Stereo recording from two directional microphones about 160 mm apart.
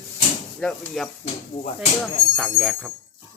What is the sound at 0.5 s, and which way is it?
Speech, centre (ahead or behind).